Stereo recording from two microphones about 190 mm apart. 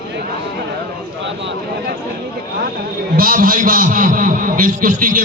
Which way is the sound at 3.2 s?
50° right (ahead or behind).